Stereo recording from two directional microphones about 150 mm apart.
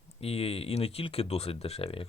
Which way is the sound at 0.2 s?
40° left (ahead or behind).